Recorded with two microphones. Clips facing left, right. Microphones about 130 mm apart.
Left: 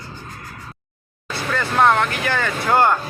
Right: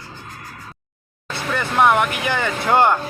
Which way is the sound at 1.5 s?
15° right (ahead or behind).